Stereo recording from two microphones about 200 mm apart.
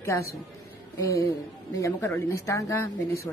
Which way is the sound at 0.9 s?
15° left (ahead or behind).